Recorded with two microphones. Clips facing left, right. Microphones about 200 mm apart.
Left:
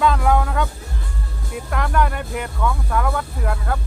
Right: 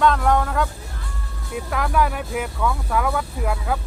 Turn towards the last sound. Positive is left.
turn(degrees=-5)  # may be behind; listen again after turning